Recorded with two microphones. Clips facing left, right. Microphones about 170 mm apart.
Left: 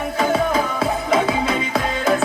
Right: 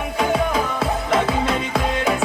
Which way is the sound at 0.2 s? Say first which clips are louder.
Left 1 dB; centre (ahead or behind).